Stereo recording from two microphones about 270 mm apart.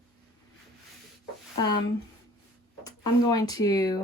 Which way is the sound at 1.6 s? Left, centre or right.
Centre.